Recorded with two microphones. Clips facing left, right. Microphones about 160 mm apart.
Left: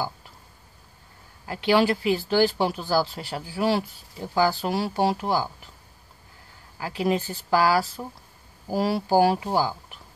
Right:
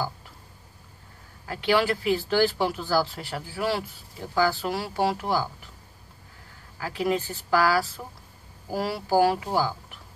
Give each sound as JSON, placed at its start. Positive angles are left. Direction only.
{"t": 1.4, "sound": "speech", "side_deg": 20}
{"t": 6.8, "sound": "speech", "side_deg": 20}